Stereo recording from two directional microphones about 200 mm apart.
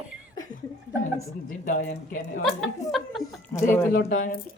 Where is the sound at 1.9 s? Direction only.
40° left (ahead or behind).